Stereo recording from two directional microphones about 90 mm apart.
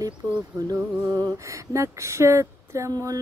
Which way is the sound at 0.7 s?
45° right (ahead or behind).